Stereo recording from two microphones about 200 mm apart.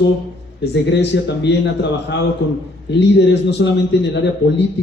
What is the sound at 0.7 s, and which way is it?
Speech, 60° left (ahead or behind).